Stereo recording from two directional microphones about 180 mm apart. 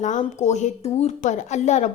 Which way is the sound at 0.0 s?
45° left (ahead or behind).